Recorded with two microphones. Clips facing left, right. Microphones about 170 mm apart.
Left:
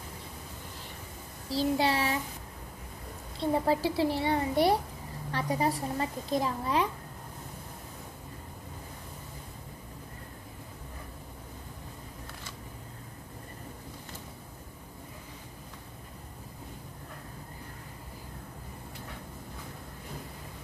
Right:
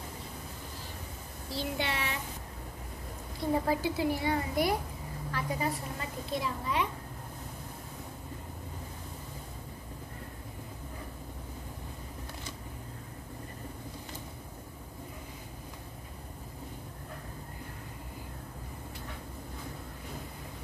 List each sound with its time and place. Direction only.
1.5 s a woman's voice: 35° left (ahead or behind)
3.3 s a woman's voice: 30° left (ahead or behind)